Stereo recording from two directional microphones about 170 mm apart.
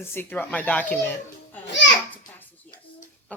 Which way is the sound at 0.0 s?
10° left (ahead or behind).